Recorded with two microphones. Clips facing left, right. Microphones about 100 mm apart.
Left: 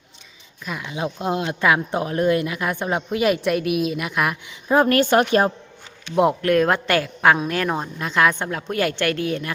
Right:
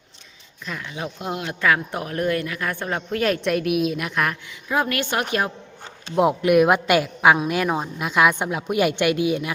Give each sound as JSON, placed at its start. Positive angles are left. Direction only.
{"t": 0.6, "sound": "speech", "side_deg": 10}
{"t": 1.0, "sound": "speech", "side_deg": 25}
{"t": 3.2, "sound": "a woman's voice", "side_deg": 5}
{"t": 4.7, "sound": "a woman's voice", "side_deg": 40}
{"t": 6.4, "sound": "a woman's voice", "side_deg": -10}